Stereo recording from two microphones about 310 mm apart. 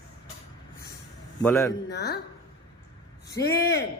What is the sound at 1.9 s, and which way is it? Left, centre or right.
Speech, left.